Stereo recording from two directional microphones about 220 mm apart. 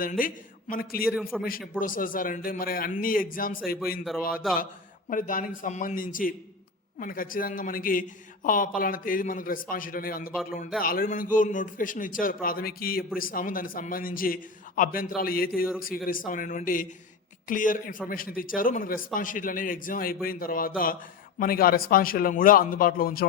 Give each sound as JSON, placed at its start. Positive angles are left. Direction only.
{"t": 0.0, "sound": "a man's voice", "side_deg": 40}
{"t": 1.2, "sound": "a man's voice", "side_deg": 0}
{"t": 1.8, "sound": "a man's voice", "side_deg": 40}